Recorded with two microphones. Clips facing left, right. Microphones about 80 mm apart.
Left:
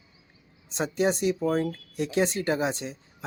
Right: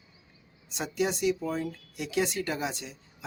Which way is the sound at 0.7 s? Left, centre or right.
Left.